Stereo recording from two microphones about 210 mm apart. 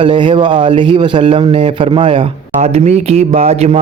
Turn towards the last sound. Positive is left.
turn(degrees=-30)  # may be behind; listen again after turning